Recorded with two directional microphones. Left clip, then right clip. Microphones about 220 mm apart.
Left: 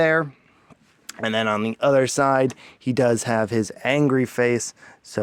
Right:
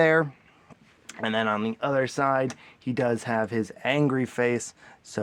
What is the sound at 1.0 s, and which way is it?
Speech, 40° left (ahead or behind).